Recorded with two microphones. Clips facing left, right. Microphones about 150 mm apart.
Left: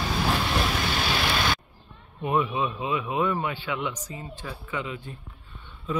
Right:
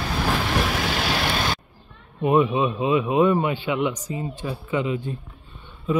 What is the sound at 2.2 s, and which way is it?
A man's voice, 20° right (ahead or behind).